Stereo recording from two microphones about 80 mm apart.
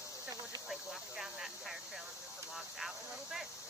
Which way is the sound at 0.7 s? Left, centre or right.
Centre.